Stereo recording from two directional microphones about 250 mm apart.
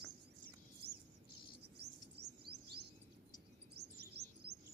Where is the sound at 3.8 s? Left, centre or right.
Right.